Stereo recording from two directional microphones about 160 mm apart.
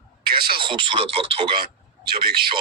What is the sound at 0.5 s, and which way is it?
Speech, 30° right (ahead or behind).